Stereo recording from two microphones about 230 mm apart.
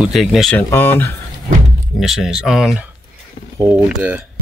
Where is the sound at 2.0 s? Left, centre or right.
Centre.